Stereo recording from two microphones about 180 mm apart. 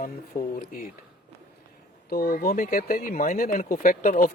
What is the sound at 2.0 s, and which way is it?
Speech, 55° left (ahead or behind).